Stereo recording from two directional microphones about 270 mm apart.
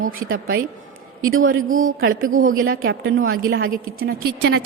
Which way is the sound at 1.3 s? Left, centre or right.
Right.